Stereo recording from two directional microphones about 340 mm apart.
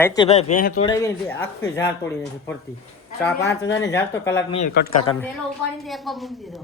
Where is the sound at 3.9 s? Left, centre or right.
Centre.